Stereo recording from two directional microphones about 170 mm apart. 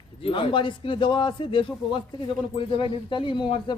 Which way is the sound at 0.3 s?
30° left (ahead or behind).